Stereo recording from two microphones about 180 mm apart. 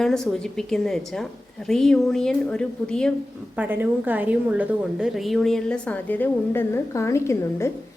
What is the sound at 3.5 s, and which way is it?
A woman's voice, 10° right (ahead or behind).